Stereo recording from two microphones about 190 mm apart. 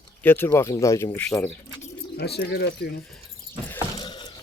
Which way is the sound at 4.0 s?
25° left (ahead or behind).